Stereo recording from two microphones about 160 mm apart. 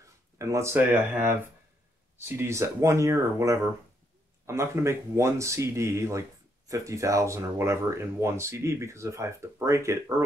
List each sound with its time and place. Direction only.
0.0 s speech: 20° right (ahead or behind)